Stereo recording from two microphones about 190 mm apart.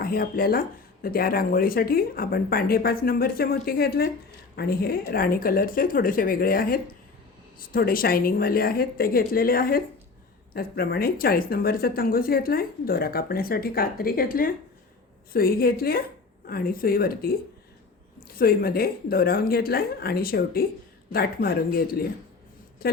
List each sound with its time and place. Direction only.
0.0 s speech: 50° left (ahead or behind)
18.3 s a woman's voice: 50° left (ahead or behind)